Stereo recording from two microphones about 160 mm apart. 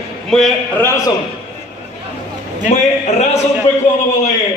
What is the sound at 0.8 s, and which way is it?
Speech, 15° left (ahead or behind).